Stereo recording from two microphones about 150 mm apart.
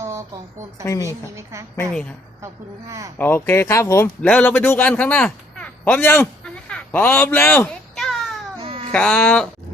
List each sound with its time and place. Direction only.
0.0 s a sound: 20° right (ahead or behind)
1.0 s a woman's voice: 20° right (ahead or behind)
1.7 s speech: 10° left (ahead or behind)
3.2 s speech: 15° left (ahead or behind)
4.2 s a man's voice: 10° left (ahead or behind)
7.6 s a sound: 5° left (ahead or behind)
8.6 s baby cry: 40° right (ahead or behind)
8.9 s speech: 10° left (ahead or behind)